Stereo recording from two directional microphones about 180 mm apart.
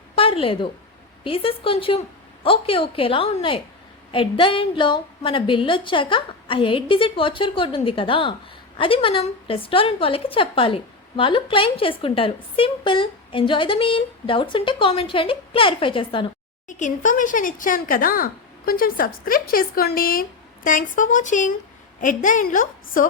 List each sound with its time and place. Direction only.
0.2 s a woman's voice: 30° left (ahead or behind)
16.6 s speech: 45° left (ahead or behind)